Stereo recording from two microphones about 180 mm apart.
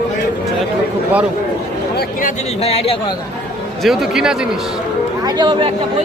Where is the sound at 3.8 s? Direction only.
Centre (ahead or behind).